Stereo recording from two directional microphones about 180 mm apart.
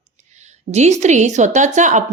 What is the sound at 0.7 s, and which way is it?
A woman's voice, 40° right (ahead or behind).